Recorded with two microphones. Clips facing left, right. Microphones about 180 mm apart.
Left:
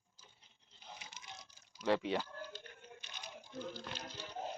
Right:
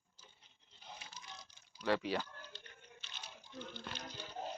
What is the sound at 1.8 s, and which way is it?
Speech, 25° left (ahead or behind).